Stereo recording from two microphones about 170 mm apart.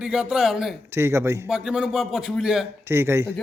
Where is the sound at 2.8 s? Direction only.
15° right (ahead or behind).